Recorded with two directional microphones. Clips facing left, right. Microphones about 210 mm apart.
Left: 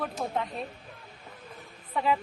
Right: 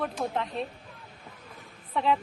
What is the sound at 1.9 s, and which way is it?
Speech, centre (ahead or behind).